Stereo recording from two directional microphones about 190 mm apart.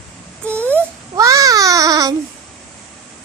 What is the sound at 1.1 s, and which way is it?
Speech, 20° right (ahead or behind).